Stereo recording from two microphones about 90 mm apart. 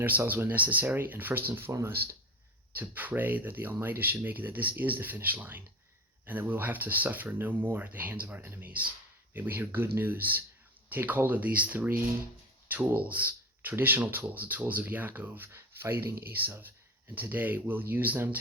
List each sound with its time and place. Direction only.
0.0 s speech: 20° right (ahead or behind)
1.7 s speech: 35° right (ahead or behind)
2.7 s speech: 20° right (ahead or behind)